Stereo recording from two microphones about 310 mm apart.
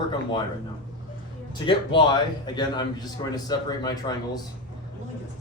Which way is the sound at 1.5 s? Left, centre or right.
Centre.